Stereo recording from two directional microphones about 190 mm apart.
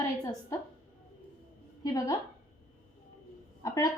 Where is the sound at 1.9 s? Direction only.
20° left (ahead or behind).